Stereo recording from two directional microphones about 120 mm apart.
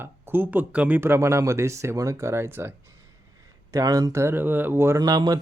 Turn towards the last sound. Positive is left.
turn(degrees=-35)  # may be behind; listen again after turning